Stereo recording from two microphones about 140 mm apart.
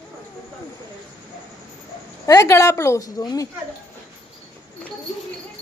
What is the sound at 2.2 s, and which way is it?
A woman's voice, 20° left (ahead or behind).